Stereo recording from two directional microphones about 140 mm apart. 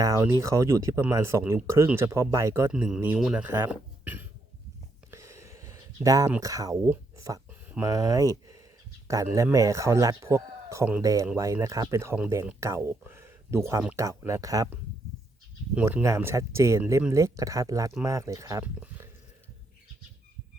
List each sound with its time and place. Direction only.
0.0 s speech: 20° right (ahead or behind)
2.7 s speech: 5° right (ahead or behind)
5.1 s a sound: 20° right (ahead or behind)
6.4 s speech: 25° right (ahead or behind)
15.7 s speech: 15° right (ahead or behind)
18.6 s speech: 10° right (ahead or behind)